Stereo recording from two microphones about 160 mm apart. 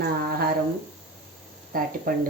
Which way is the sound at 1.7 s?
60° right (ahead or behind).